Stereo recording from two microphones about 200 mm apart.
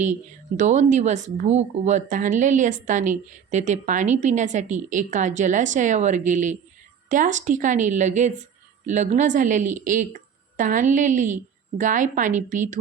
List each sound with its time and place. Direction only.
0.0 s speech: 35° right (ahead or behind)